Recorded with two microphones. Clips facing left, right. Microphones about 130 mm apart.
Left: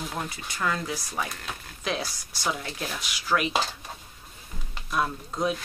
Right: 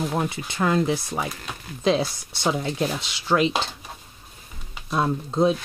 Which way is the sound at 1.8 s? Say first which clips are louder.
Right 10 dB; 25° right (ahead or behind).